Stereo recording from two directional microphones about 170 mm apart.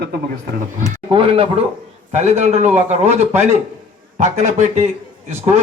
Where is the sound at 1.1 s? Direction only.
30° right (ahead or behind).